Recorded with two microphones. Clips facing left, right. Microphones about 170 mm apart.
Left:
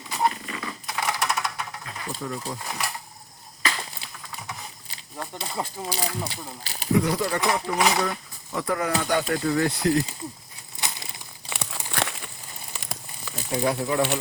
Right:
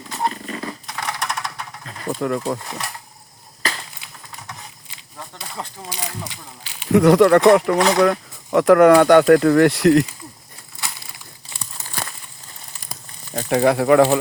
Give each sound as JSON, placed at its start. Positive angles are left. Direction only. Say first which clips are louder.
{"t": 0.4, "sound": "a sound", "louder": "right 5 dB", "side_deg": -40}
{"t": 0.9, "sound": "typewriter", "louder": "left 1 dB", "side_deg": 5}
{"t": 2.0, "sound": "speech", "louder": "right 11 dB", "side_deg": -65}
{"t": 5.9, "sound": "speech", "louder": "left 2 dB", "side_deg": 30}
{"t": 6.9, "sound": "speech", "louder": "right 12 dB", "side_deg": -75}
{"t": 11.4, "sound": "crumpling", "louder": "left 6 dB", "side_deg": 75}
{"t": 11.9, "sound": "a sound", "louder": "left 3 dB", "side_deg": 80}
{"t": 12.7, "sound": "fire", "louder": "left 3 dB", "side_deg": 85}
{"t": 13.3, "sound": "speech", "louder": "right 9 dB", "side_deg": -75}